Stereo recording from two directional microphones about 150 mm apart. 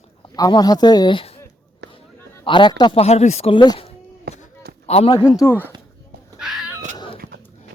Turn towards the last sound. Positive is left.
turn(degrees=-5)  # may be behind; listen again after turning